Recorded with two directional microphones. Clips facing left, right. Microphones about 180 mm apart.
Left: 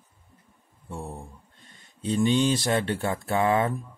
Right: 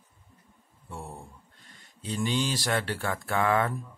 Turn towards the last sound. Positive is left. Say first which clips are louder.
# left 3 dB
turn(degrees=20)  # may be behind; listen again after turning